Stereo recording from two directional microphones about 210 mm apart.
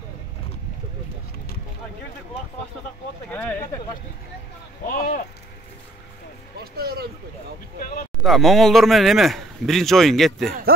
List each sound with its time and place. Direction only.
3.3 s speech: 10° left (ahead or behind)
4.8 s speech: 40° left (ahead or behind)
6.6 s speech: 45° right (ahead or behind)
8.2 s speech: centre (ahead or behind)